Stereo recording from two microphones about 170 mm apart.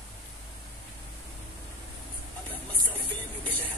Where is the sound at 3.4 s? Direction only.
10° left (ahead or behind).